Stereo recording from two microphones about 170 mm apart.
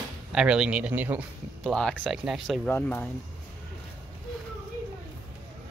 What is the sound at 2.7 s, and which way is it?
Speech, 10° left (ahead or behind).